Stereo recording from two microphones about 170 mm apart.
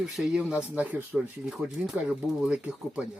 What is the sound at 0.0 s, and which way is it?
Speech, 5° right (ahead or behind).